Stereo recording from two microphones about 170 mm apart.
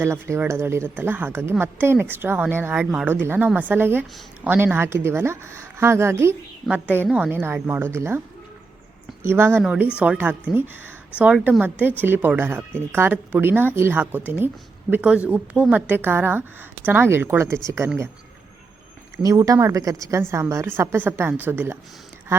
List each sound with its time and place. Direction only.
0.0 s speech: 15° right (ahead or behind)
9.2 s speech: 15° right (ahead or behind)
19.2 s speech: 20° right (ahead or behind)